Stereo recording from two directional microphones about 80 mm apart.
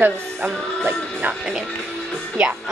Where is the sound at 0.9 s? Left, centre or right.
Centre.